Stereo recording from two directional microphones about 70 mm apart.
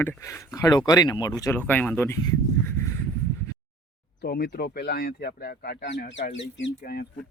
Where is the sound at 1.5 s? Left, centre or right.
Left.